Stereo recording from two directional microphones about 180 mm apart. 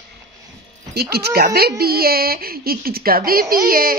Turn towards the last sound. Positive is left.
turn(degrees=-55)  # may be behind; listen again after turning